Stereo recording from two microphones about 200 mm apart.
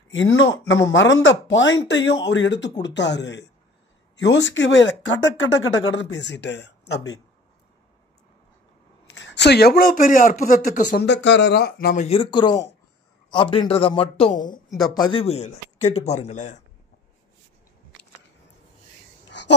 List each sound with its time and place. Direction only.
0.1 s speech: 70° left (ahead or behind)
9.1 s speech: 60° left (ahead or behind); by 11.1 s 40° left (ahead or behind)
11.1 s speech: 60° left (ahead or behind)
12.1 s speech: 25° left (ahead or behind)
14.7 s speech: centre (ahead or behind)
15.1 s a man's voice: 30° left (ahead or behind)